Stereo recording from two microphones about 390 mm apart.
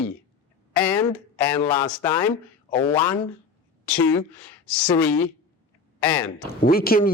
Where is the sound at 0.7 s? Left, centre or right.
Centre.